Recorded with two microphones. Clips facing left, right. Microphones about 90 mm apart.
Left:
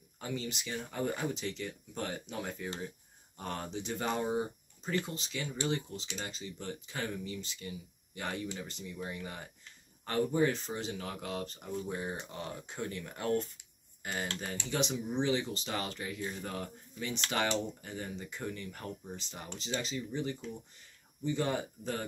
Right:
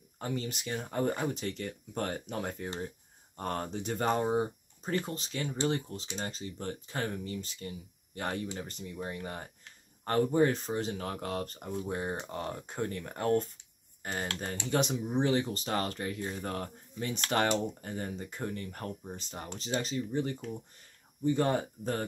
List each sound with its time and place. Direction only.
0.2 s speech: 45° right (ahead or behind)